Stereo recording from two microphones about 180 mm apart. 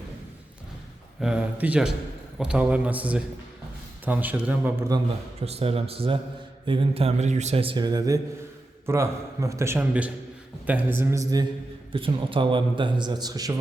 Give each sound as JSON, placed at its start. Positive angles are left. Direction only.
{"t": 1.2, "sound": "a man's voice", "side_deg": -5}
{"t": 5.4, "sound": "a man's voice", "side_deg": -35}